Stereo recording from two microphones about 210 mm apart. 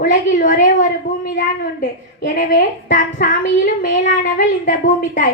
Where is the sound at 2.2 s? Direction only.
40° left (ahead or behind).